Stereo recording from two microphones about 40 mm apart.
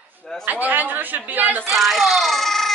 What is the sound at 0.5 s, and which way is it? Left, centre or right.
A woman's voice, right.